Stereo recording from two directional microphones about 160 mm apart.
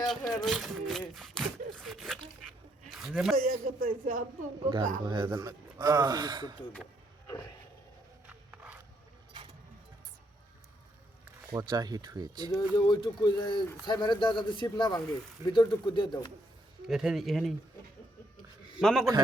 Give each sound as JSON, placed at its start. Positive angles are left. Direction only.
{"t": 0.0, "sound": "speech", "side_deg": 0}
{"t": 3.3, "sound": "speech", "side_deg": -65}
{"t": 5.0, "sound": "speech", "side_deg": -30}
{"t": 8.3, "sound": "walk", "side_deg": -5}
{"t": 9.3, "sound": "keys jangling", "side_deg": -30}
{"t": 11.5, "sound": "speech", "side_deg": -25}
{"t": 12.5, "sound": "speech", "side_deg": 25}
{"t": 16.9, "sound": "speech", "side_deg": -5}
{"t": 18.8, "sound": "a man's voice", "side_deg": 0}